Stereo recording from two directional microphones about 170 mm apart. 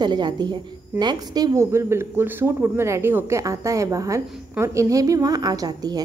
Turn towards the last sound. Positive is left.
turn(degrees=-25)  # may be behind; listen again after turning